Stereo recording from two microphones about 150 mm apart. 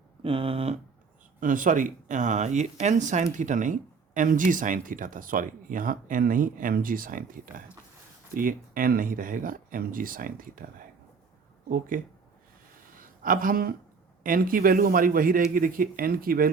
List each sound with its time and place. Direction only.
0.2 s speech: 40° right (ahead or behind)
1.4 s speech: 60° right (ahead or behind)
11.7 s speech: 65° right (ahead or behind)